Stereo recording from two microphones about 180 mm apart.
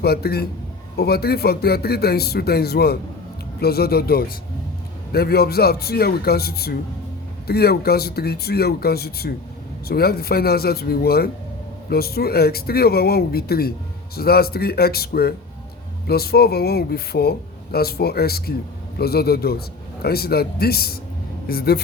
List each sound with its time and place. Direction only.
0.0 s speech: 60° left (ahead or behind)